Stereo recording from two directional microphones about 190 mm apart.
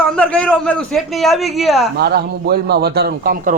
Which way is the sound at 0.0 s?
5° left (ahead or behind).